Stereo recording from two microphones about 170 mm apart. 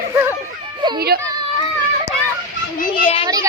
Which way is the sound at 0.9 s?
65° right (ahead or behind).